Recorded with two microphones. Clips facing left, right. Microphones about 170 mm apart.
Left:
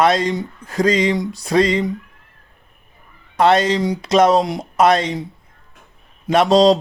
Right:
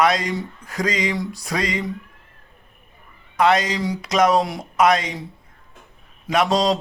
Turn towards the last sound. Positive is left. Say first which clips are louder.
# left 7 dB
turn(degrees=25)  # may be behind; listen again after turning